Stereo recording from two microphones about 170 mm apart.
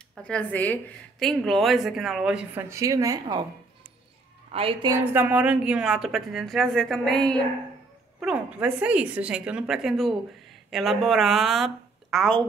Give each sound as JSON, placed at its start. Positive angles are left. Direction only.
{"t": 0.1, "sound": "a woman's voice", "side_deg": 5}
{"t": 2.7, "sound": "a woman's voice", "side_deg": -20}
{"t": 4.5, "sound": "a woman's voice", "side_deg": -35}
{"t": 4.8, "sound": "a woman's voice", "side_deg": -15}